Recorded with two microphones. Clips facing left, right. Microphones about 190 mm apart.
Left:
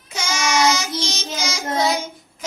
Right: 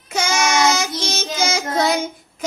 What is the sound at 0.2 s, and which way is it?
Child singing, 55° right (ahead or behind).